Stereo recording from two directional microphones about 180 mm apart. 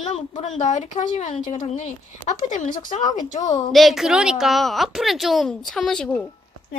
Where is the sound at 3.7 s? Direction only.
Centre (ahead or behind).